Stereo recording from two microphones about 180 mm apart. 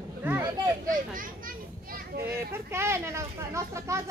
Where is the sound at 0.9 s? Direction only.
50° right (ahead or behind).